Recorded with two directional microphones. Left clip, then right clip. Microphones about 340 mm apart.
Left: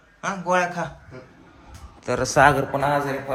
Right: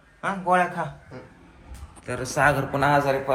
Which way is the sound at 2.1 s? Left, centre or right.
Centre.